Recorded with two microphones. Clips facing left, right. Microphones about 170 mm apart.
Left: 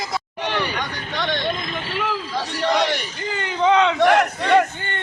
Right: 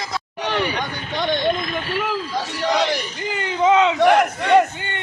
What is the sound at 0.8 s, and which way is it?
Speech, 20° right (ahead or behind).